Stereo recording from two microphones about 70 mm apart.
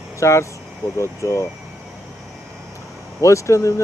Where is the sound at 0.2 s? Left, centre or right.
Left.